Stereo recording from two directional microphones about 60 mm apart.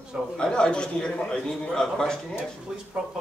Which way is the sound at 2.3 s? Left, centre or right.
Centre.